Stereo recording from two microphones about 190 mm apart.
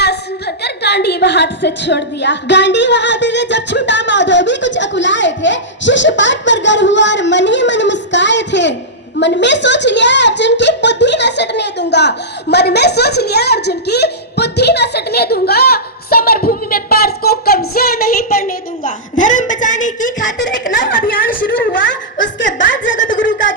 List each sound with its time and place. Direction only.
0.0 s a woman's voice: 60° left (ahead or behind)
18.4 s a woman's voice: 45° left (ahead or behind)